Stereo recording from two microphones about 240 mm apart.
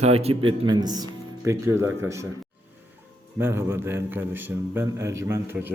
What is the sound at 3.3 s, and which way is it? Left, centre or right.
A man's voice, centre.